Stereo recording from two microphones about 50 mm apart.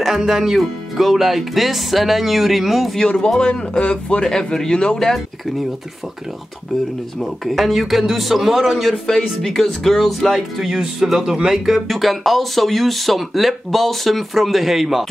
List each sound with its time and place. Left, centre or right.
0.0 s speech: centre
3.0 s a man's voice: centre
7.4 s speech: centre
10.7 s speech: centre